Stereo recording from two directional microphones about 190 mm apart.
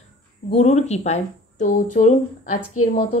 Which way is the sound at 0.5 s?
35° left (ahead or behind).